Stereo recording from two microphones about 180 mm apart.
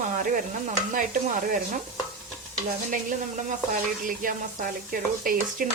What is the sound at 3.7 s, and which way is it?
Speech, 50° right (ahead or behind).